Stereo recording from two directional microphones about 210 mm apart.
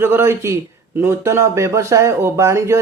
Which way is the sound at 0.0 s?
10° right (ahead or behind).